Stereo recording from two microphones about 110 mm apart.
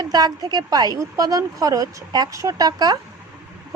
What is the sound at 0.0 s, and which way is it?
A woman's voice, 35° right (ahead or behind).